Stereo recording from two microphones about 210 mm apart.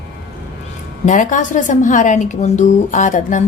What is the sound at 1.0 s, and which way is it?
A woman's voice, 35° left (ahead or behind).